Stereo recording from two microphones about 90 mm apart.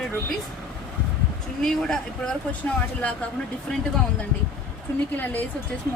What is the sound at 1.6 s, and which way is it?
Speech, 5° left (ahead or behind).